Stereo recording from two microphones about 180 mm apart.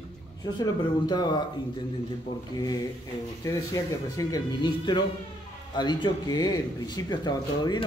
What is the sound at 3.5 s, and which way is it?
Speech, 20° left (ahead or behind).